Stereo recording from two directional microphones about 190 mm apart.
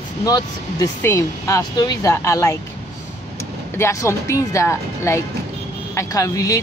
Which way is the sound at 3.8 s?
15° left (ahead or behind).